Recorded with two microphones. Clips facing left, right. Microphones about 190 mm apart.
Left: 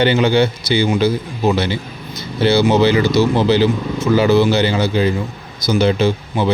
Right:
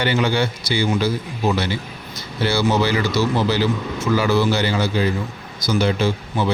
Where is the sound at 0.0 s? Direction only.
25° left (ahead or behind).